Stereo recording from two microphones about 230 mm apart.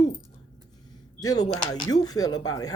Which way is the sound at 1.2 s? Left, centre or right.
Centre.